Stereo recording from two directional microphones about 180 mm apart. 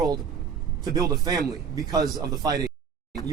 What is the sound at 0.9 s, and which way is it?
Speech, 20° right (ahead or behind).